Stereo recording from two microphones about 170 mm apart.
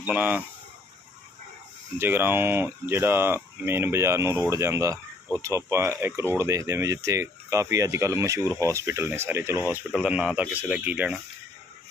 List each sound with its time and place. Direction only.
0.0 s speech: 10° right (ahead or behind)
2.0 s speech: 10° right (ahead or behind)